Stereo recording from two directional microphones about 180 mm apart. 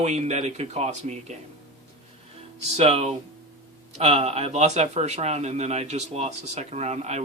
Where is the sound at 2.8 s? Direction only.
35° right (ahead or behind).